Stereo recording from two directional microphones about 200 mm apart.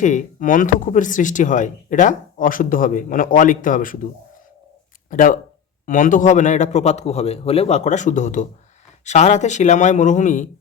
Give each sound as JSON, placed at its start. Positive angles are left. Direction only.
{"t": 0.0, "sound": "speech", "side_deg": 40}
{"t": 5.1, "sound": "speech", "side_deg": 40}